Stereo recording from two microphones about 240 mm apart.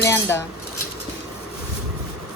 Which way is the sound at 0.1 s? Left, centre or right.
Centre.